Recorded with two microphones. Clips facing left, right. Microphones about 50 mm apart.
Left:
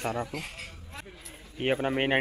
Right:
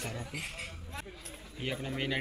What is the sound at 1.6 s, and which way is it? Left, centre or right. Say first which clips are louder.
Speech: left 9 dB; left.